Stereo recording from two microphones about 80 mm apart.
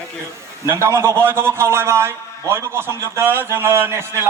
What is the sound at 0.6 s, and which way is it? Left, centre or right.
A man's voice, right.